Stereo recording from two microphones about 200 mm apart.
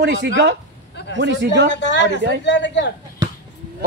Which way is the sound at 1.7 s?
60° left (ahead or behind).